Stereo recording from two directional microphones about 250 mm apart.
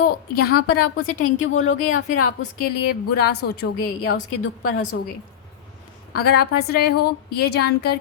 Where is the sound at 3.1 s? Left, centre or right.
Left.